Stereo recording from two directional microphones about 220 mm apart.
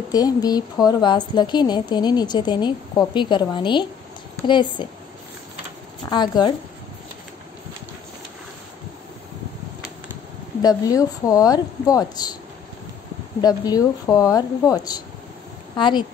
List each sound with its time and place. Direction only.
0.1 s a woman's voice: 15° left (ahead or behind)
6.0 s a woman's voice: 20° left (ahead or behind)
10.6 s speech: 15° left (ahead or behind)
13.4 s speech: 15° left (ahead or behind)